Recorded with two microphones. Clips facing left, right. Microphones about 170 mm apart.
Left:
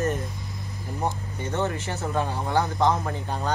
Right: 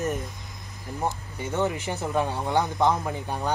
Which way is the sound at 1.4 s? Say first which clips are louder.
Right 1 dB; 10° right (ahead or behind).